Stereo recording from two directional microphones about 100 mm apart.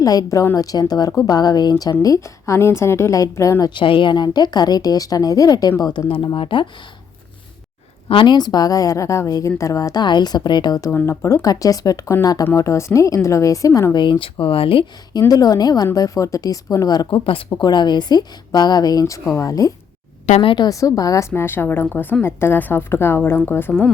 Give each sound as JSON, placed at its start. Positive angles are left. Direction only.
{"t": 0.0, "sound": "a woman's voice", "side_deg": 35}
{"t": 3.8, "sound": "a woman's voice", "side_deg": 55}
{"t": 6.1, "sound": "speech", "side_deg": 65}
{"t": 8.0, "sound": "a woman's voice", "side_deg": 55}
{"t": 11.0, "sound": "a woman's voice", "side_deg": 30}
{"t": 13.9, "sound": "speech", "side_deg": 50}
{"t": 15.3, "sound": "a woman's voice", "side_deg": 40}
{"t": 17.1, "sound": "a woman's voice", "side_deg": 60}
{"t": 20.4, "sound": "speech", "side_deg": 60}
{"t": 20.7, "sound": "a woman's voice", "side_deg": 35}